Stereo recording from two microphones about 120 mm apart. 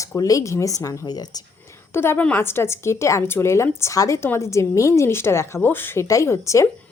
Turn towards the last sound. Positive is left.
turn(degrees=25)  # may be behind; listen again after turning